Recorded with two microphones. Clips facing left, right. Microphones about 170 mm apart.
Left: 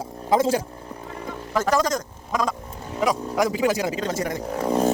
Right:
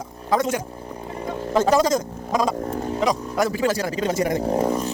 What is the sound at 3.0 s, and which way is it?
Chainsaw, 15° left (ahead or behind).